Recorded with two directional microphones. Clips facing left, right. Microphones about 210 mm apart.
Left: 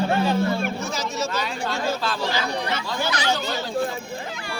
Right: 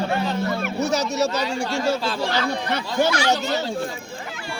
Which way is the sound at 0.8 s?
70° right (ahead or behind).